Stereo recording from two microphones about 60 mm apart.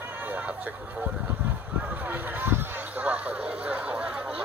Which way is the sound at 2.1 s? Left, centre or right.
Right.